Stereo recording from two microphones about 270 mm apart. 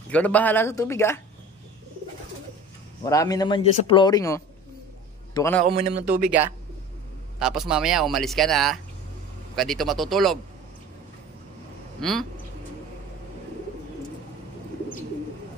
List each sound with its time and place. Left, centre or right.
0.1 s a man's voice: centre
3.0 s a man's voice: centre
5.6 s speech: right
6.0 s speech: centre
12.0 s speech: centre